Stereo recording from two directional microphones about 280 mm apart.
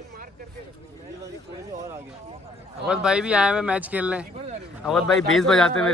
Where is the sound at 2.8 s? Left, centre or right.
Centre.